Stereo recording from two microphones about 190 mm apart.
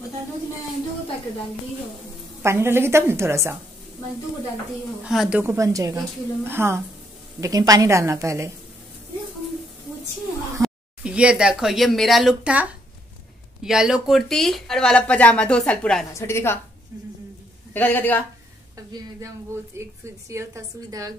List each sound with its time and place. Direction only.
2.4 s a woman's voice: 15° right (ahead or behind)
5.0 s speech: 5° right (ahead or behind)
5.4 s a woman's voice: 15° right (ahead or behind)
10.6 s a woman's voice: 5° right (ahead or behind); by 16.5 s 15° left (ahead or behind)
17.7 s a woman's voice: 10° left (ahead or behind)
18.8 s a woman's voice: 20° right (ahead or behind)